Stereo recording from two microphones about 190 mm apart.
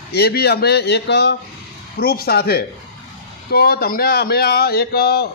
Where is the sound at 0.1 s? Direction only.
55° left (ahead or behind).